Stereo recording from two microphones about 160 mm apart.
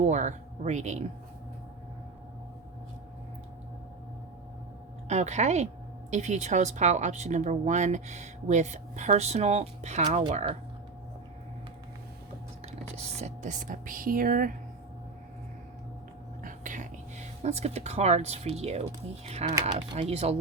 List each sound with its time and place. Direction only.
0.0 s speech: 50° right (ahead or behind)
5.0 s speech: 45° right (ahead or behind)
12.6 s speech: 45° right (ahead or behind); by 14.5 s 65° right (ahead or behind)
16.4 s speech: 55° right (ahead or behind)